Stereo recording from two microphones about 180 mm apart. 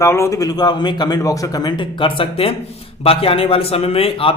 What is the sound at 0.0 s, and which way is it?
A man's voice, 15° left (ahead or behind).